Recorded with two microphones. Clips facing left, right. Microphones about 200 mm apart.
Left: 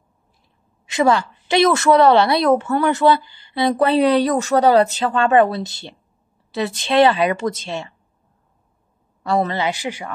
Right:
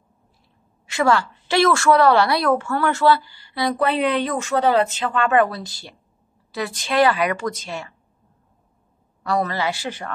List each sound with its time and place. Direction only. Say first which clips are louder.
0.8 s a woman's voice: left 2 dB; 20° left (ahead or behind)
9.2 s a woman's voice: left 3 dB; 25° left (ahead or behind)